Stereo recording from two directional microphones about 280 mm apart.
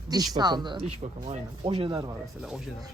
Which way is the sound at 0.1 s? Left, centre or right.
Centre.